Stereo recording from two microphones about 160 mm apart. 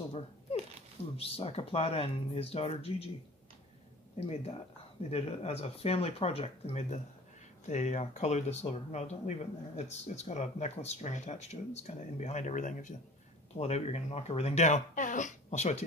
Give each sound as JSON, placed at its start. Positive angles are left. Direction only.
{"t": 1.1, "sound": "speech", "side_deg": 35}
{"t": 4.2, "sound": "speech", "side_deg": 40}